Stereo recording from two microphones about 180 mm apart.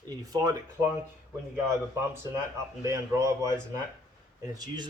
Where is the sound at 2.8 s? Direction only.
15° right (ahead or behind).